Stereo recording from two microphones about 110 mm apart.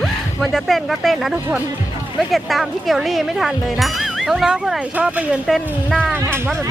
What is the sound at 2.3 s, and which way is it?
A woman's voice, centre (ahead or behind).